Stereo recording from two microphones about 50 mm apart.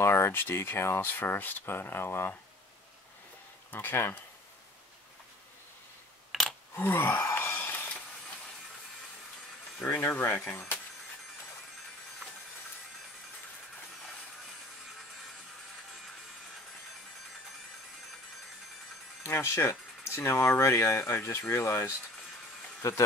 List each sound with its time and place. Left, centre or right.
0.0 s speech: left
1.0 s speech: left
3.7 s speech: left
6.7 s speech: left
7.3 s a sound: left
9.8 s speech: left
19.2 s speech: left
22.8 s speech: left